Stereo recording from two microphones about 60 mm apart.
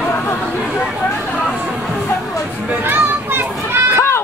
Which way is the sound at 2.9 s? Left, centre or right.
Right.